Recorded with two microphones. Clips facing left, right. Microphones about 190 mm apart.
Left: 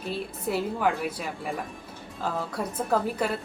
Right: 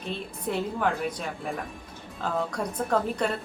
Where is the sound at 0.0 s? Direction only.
5° left (ahead or behind).